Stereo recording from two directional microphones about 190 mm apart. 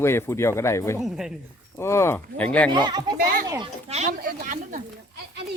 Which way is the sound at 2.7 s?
25° right (ahead or behind).